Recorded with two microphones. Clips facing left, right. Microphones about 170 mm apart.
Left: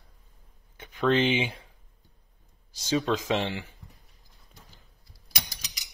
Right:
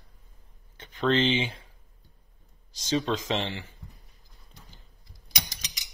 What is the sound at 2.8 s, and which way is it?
Speech, 10° left (ahead or behind).